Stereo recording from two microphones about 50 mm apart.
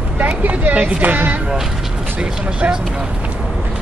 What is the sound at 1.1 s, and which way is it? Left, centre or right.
Speech, right.